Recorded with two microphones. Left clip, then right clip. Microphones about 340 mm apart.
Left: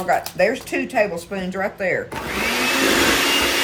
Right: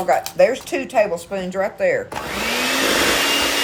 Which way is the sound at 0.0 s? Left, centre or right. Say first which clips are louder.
Right 3 dB; centre.